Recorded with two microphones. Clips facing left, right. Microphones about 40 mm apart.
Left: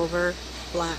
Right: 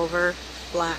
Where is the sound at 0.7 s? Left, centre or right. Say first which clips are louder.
Right 3 dB; centre.